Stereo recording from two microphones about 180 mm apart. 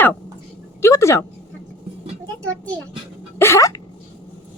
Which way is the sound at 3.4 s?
15° left (ahead or behind).